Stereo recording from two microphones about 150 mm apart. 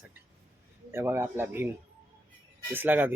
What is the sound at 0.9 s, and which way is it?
Speech, 15° right (ahead or behind).